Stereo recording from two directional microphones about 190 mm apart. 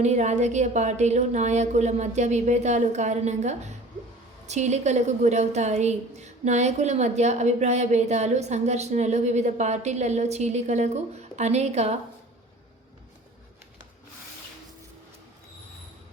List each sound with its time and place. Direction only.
0.0 s a woman's voice: 35° right (ahead or behind)